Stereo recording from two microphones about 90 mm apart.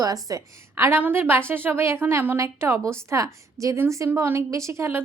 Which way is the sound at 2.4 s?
30° right (ahead or behind).